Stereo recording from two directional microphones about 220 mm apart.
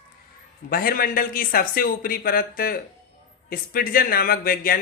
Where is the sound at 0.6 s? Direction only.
40° left (ahead or behind).